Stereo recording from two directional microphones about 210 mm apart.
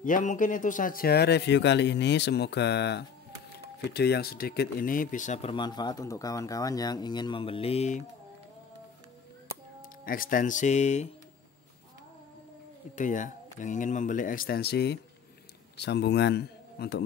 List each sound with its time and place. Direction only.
0.0 s a man's voice: 40° left (ahead or behind)
10.0 s speech: 40° left (ahead or behind)
12.9 s a man's voice: 35° left (ahead or behind)